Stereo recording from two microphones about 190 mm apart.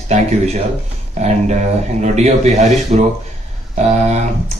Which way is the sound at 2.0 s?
35° right (ahead or behind).